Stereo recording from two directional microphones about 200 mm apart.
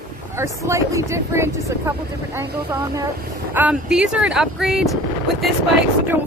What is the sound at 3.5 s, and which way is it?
Speech, 5° right (ahead or behind).